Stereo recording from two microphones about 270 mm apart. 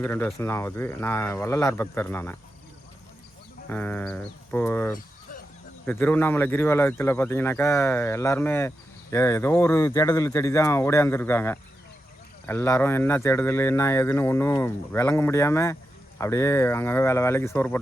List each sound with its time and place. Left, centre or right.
0.0 s speech: centre
3.7 s speech: centre
4.9 s a sound: left
5.8 s speech: centre